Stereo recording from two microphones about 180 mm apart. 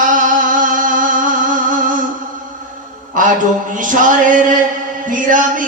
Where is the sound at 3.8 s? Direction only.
45° right (ahead or behind).